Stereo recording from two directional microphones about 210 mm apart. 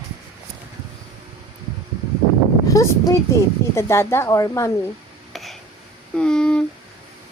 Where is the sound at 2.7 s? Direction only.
15° left (ahead or behind).